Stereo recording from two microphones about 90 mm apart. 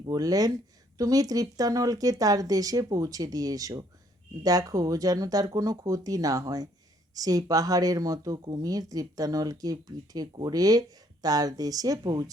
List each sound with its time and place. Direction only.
0.0 s speech: 45° right (ahead or behind)